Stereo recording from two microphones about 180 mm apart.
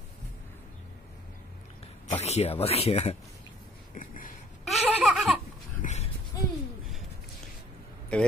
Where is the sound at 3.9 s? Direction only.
50° left (ahead or behind).